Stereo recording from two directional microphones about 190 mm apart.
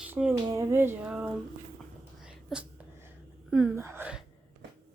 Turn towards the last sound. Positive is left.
turn(degrees=-5)  # may be behind; listen again after turning